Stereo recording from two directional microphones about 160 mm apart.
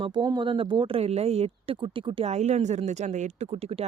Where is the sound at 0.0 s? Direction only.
30° right (ahead or behind).